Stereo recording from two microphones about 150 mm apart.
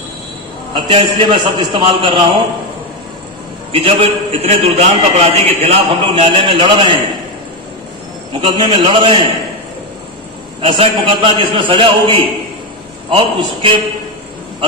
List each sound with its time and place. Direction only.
0.7 s a man's voice: 35° right (ahead or behind)
3.7 s a man's voice: 40° right (ahead or behind)
8.3 s a man's voice: 35° right (ahead or behind)
10.6 s a man's voice: 35° right (ahead or behind)